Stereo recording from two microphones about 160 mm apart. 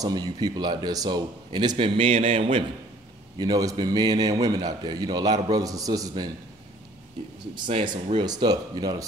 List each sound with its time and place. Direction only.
0.0 s a man's voice: 25° right (ahead or behind)
3.3 s a man's voice: 25° right (ahead or behind)
7.5 s a man's voice: 30° right (ahead or behind)